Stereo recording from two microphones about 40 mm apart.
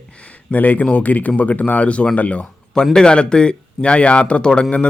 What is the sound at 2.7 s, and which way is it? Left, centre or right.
Speech, centre.